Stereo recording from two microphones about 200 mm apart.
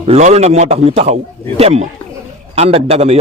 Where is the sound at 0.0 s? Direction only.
35° right (ahead or behind).